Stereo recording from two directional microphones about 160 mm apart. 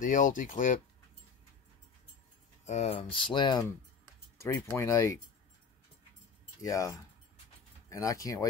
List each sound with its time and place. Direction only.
0.0 s speech: 55° left (ahead or behind)
2.6 s speech: 45° left (ahead or behind)
4.4 s speech: 20° left (ahead or behind)
6.6 s speech: 20° left (ahead or behind)